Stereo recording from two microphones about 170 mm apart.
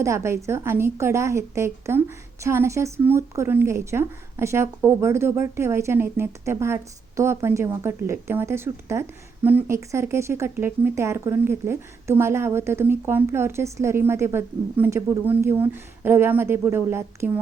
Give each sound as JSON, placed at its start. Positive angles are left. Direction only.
{"t": 0.0, "sound": "a woman's voice", "side_deg": -15}